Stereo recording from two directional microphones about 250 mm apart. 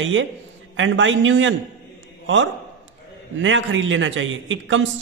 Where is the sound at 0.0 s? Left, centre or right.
Right.